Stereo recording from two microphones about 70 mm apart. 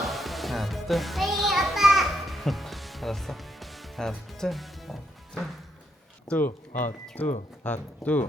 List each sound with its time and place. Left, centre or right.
0.0 s music: centre
6.3 s speech: centre